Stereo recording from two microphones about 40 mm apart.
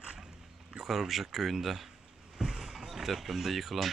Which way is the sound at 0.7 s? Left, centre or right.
Centre.